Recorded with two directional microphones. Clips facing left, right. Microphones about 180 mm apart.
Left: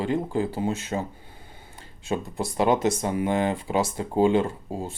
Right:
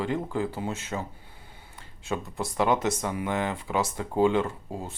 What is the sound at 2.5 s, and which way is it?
Speech, 30° left (ahead or behind).